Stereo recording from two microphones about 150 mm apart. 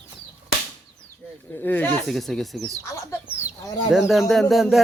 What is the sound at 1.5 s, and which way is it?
Speech, 15° left (ahead or behind).